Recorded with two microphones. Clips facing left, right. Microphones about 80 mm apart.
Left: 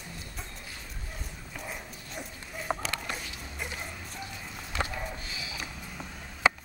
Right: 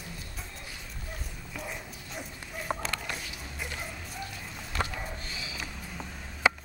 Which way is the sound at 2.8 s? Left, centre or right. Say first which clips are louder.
Even; centre.